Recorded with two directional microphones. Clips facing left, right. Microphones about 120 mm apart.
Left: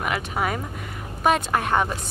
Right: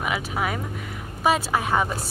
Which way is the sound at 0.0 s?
Centre (ahead or behind).